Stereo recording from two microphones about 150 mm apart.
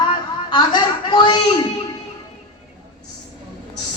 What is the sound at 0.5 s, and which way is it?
Chuckle, 30° left (ahead or behind).